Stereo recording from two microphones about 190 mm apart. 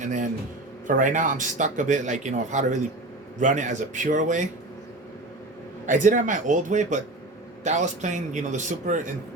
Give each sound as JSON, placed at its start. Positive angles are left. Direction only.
{"t": 0.0, "sound": "speech", "side_deg": -40}
{"t": 5.8, "sound": "speech", "side_deg": -40}